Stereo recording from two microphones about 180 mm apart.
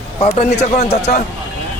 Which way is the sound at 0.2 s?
35° left (ahead or behind).